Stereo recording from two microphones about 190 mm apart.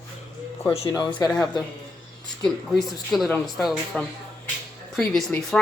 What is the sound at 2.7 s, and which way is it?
Speech, centre (ahead or behind).